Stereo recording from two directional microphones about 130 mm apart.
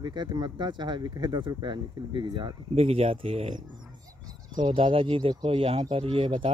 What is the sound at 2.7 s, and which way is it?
Speech, 50° right (ahead or behind).